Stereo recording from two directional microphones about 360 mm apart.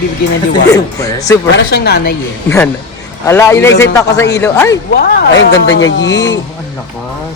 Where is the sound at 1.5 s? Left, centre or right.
Left.